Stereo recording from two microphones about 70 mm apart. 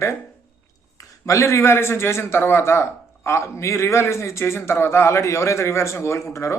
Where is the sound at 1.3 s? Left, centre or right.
Left.